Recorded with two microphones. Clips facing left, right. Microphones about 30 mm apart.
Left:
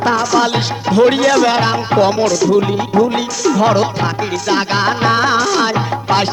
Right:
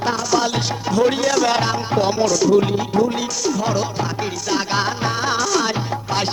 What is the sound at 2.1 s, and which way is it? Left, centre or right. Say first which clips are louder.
Music: left 3 dB; left.